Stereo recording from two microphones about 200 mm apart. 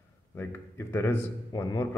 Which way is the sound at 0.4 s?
10° left (ahead or behind).